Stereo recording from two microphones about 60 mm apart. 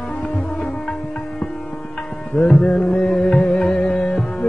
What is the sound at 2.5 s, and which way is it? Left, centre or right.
Music, centre.